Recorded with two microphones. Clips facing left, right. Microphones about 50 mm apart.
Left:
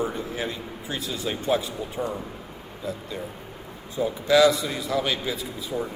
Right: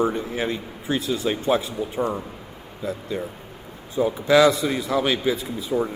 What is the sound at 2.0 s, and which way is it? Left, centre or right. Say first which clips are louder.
Speech: right 5 dB; right.